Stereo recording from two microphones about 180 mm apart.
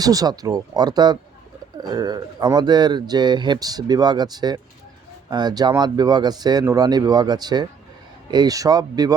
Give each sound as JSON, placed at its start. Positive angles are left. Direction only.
{"t": 0.0, "sound": "speech", "side_deg": -20}